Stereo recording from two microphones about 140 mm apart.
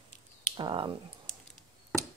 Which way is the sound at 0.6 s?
35° right (ahead or behind).